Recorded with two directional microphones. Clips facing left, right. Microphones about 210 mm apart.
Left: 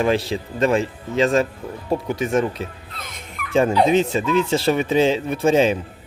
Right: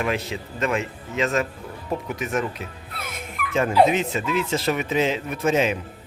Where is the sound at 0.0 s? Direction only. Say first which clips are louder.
Left 6 dB; 30° left (ahead or behind).